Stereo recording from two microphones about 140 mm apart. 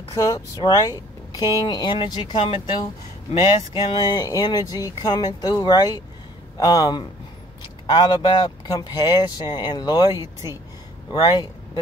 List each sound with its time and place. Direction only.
0.1 s speech: 25° left (ahead or behind)
3.7 s a man's voice: 30° left (ahead or behind)